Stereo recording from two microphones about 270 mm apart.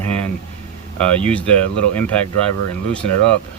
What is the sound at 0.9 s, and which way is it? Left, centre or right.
Speech, centre.